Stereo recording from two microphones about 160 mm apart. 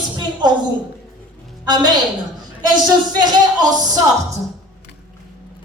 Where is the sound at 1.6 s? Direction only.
25° right (ahead or behind).